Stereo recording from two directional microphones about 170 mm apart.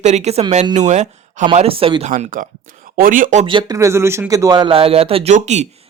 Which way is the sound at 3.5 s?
30° right (ahead or behind).